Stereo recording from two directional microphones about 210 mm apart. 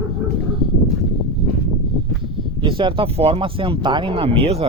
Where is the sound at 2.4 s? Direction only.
25° right (ahead or behind).